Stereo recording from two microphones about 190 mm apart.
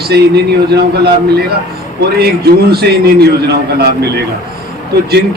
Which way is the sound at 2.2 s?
55° right (ahead or behind).